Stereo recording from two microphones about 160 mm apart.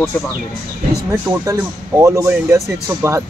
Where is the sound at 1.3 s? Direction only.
20° right (ahead or behind).